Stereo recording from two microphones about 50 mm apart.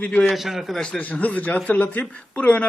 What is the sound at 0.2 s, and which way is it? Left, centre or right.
Speech, centre.